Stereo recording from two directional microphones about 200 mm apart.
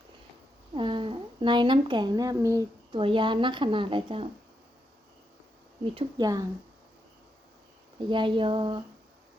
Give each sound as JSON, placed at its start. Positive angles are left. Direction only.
{"t": 0.7, "sound": "speech", "side_deg": -25}
{"t": 5.8, "sound": "speech", "side_deg": -25}
{"t": 7.9, "sound": "speech", "side_deg": -25}